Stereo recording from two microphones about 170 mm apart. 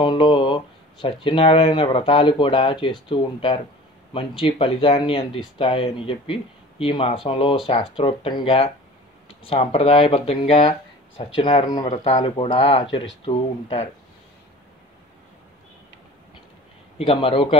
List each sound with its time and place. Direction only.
0.0 s speech: 30° left (ahead or behind)
11.9 s speech: 40° left (ahead or behind)
12.2 s speech: 30° left (ahead or behind)
17.0 s speech: 30° left (ahead or behind)